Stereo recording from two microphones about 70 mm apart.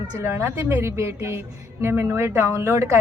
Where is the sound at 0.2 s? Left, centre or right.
Right.